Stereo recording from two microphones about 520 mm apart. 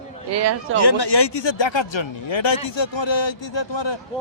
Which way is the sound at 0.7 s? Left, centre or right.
Left.